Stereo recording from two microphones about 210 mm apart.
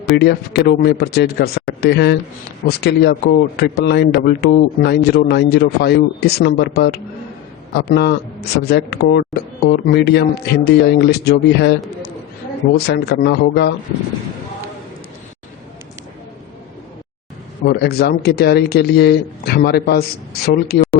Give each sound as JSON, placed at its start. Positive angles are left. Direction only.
{"t": 0.2, "sound": "speech", "side_deg": 55}
{"t": 12.7, "sound": "speech", "side_deg": 50}
{"t": 17.6, "sound": "speech", "side_deg": 50}